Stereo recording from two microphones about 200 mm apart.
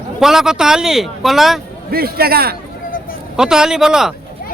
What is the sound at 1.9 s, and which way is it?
Speech, 50° right (ahead or behind).